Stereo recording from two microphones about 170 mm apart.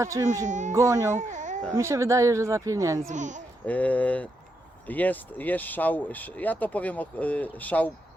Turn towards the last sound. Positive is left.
turn(degrees=10)  # may be behind; listen again after turning